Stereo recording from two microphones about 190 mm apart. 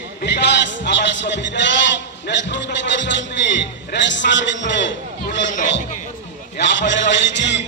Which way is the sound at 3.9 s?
70° left (ahead or behind).